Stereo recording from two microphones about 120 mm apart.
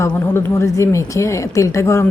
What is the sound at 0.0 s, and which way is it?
Speech, 25° left (ahead or behind).